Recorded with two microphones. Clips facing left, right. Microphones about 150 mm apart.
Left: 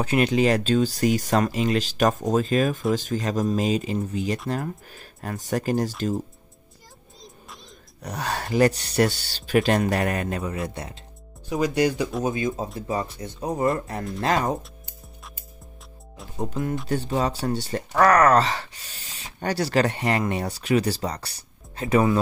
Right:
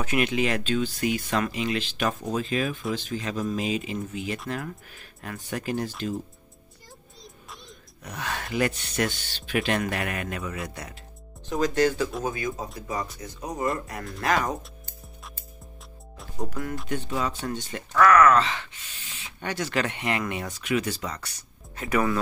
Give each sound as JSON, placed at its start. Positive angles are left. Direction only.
{"t": 0.0, "sound": "speech", "side_deg": 35}
{"t": 8.0, "sound": "speech", "side_deg": 35}
{"t": 11.4, "sound": "speech", "side_deg": 10}
{"t": 16.3, "sound": "speech", "side_deg": 25}
{"t": 16.8, "sound": "speech", "side_deg": 35}